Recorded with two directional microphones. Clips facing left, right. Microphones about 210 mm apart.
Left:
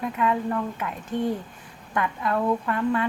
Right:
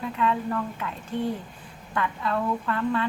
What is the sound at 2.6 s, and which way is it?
Speech, 10° left (ahead or behind).